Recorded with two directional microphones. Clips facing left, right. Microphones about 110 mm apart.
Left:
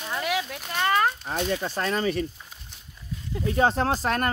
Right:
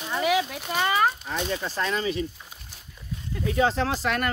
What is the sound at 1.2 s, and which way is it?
Speech, 45° left (ahead or behind).